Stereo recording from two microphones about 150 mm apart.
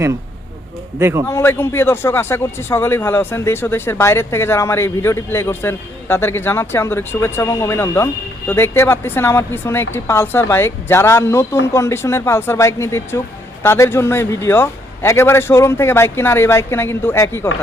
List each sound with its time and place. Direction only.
0.9 s a man's voice: 20° right (ahead or behind)
1.3 s a man's voice: 15° left (ahead or behind)